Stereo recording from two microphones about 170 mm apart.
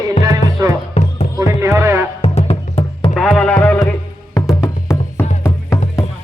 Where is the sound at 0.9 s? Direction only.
45° left (ahead or behind).